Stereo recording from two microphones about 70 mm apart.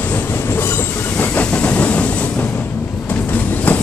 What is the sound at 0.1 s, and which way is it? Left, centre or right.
Train, left.